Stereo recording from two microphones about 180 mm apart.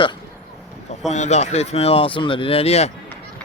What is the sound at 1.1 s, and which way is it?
A man's voice, 40° left (ahead or behind).